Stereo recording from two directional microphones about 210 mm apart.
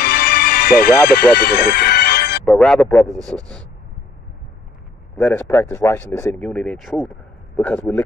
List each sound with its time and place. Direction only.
0.0 s music: 45° left (ahead or behind)
2.4 s speech: 5° left (ahead or behind)
5.2 s speech: 10° left (ahead or behind)